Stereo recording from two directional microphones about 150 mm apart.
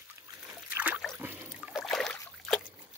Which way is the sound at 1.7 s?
Centre (ahead or behind).